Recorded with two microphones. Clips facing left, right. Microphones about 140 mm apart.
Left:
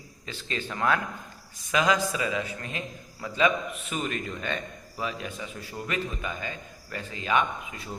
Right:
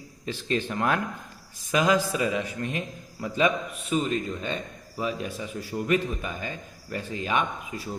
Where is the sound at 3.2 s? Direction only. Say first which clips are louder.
Right 1 dB; 40° right (ahead or behind).